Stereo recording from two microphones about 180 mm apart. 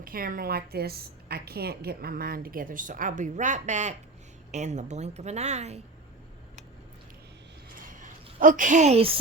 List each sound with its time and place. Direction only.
0.0 s a woman's voice: 55° right (ahead or behind); by 5.8 s 40° right (ahead or behind)
8.0 s a woman's voice: 45° right (ahead or behind)